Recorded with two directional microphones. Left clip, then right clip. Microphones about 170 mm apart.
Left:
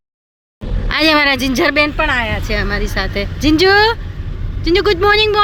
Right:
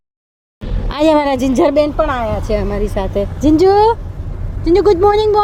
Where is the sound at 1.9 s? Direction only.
10° left (ahead or behind).